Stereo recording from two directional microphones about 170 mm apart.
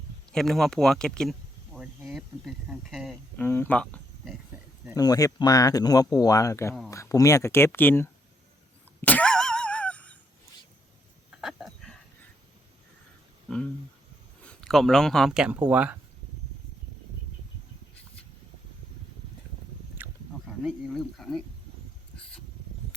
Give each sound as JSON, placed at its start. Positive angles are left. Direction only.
{"t": 0.3, "sound": "speech", "side_deg": 0}
{"t": 3.4, "sound": "speech", "side_deg": 15}
{"t": 4.9, "sound": "speech", "side_deg": 20}
{"t": 9.0, "sound": "cough", "side_deg": 10}
{"t": 11.3, "sound": "a sound", "side_deg": -5}
{"t": 14.4, "sound": "speech", "side_deg": 5}
{"t": 20.0, "sound": "a sound", "side_deg": -10}
{"t": 20.9, "sound": "speech", "side_deg": 0}